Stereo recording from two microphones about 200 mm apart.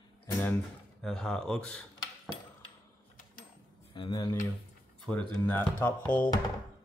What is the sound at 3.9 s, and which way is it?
Speech, 20° left (ahead or behind).